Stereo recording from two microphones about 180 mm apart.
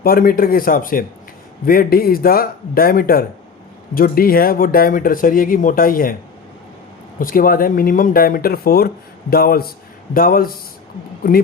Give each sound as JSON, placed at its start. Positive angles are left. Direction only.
{"t": 0.0, "sound": "speech", "side_deg": 55}
{"t": 7.2, "sound": "speech", "side_deg": 50}